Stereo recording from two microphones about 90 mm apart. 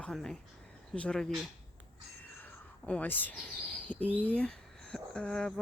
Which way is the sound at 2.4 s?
15° left (ahead or behind).